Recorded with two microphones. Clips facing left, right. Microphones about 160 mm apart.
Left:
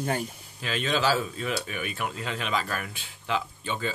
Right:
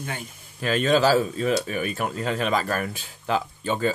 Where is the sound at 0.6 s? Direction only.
45° right (ahead or behind).